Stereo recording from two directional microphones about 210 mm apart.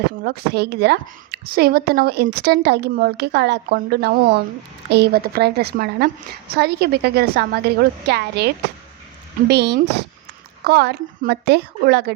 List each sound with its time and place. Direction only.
0.2 s a woman's voice: 50° right (ahead or behind)
9.5 s a woman's voice: 50° right (ahead or behind)